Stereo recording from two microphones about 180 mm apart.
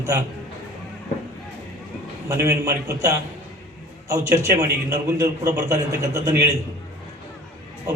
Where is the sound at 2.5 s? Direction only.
20° right (ahead or behind).